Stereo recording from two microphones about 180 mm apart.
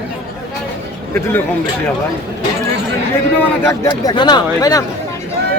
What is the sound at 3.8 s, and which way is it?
Speech, 25° left (ahead or behind).